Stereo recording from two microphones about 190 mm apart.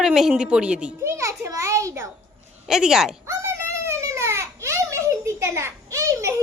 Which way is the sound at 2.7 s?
5° right (ahead or behind).